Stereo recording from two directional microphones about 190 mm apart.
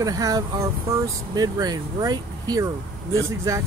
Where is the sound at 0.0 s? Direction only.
20° right (ahead or behind).